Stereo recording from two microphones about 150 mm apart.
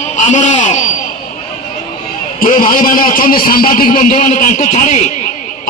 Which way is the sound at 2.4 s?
70° left (ahead or behind).